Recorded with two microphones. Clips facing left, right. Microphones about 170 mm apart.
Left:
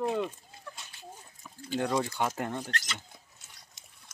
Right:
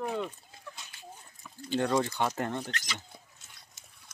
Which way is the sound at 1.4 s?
5° left (ahead or behind).